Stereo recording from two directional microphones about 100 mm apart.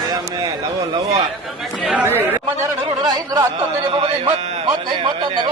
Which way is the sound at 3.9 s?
65° right (ahead or behind).